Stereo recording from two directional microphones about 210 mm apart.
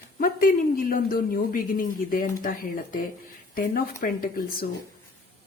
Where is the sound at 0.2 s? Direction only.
40° left (ahead or behind).